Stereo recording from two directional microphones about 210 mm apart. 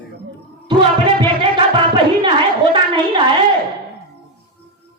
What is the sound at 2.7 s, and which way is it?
Speech, 25° right (ahead or behind).